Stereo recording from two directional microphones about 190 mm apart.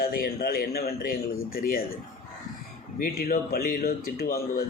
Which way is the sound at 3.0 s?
50° left (ahead or behind).